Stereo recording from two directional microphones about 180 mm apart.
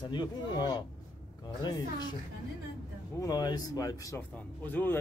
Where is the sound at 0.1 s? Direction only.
25° left (ahead or behind).